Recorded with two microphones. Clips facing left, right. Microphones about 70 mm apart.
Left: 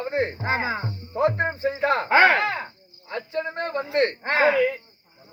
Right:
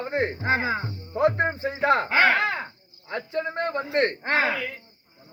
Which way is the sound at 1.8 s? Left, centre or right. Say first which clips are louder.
Left 2 dB; right.